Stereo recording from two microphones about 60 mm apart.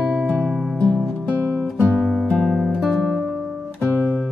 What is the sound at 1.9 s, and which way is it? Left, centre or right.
Music, centre.